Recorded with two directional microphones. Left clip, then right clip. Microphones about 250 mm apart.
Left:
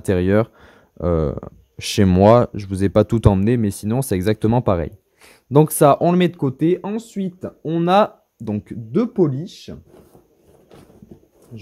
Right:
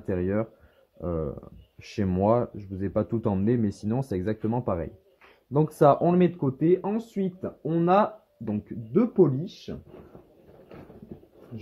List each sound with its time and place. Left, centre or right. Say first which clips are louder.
0.0 s speech: left 10 dB; left